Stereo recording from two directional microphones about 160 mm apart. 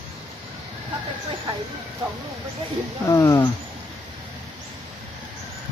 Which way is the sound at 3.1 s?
20° left (ahead or behind).